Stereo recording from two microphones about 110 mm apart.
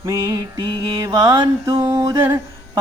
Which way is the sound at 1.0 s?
35° right (ahead or behind).